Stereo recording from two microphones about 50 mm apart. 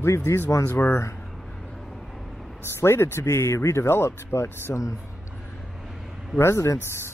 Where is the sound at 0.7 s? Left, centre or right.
Left.